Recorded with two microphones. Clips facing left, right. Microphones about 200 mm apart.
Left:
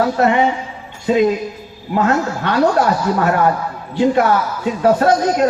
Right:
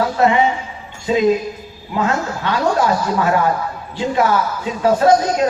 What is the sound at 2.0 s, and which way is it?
A man's voice, 55° left (ahead or behind).